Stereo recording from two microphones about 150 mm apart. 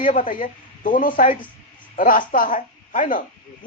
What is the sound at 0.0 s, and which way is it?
Speech, 60° left (ahead or behind).